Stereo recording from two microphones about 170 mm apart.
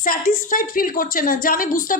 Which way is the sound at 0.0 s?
55° left (ahead or behind).